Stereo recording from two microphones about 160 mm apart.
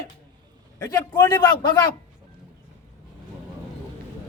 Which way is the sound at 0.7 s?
15° left (ahead or behind).